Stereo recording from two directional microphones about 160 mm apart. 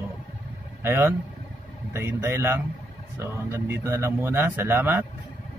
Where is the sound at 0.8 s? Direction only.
15° right (ahead or behind).